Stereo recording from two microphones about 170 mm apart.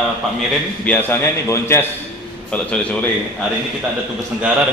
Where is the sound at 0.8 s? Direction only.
10° left (ahead or behind).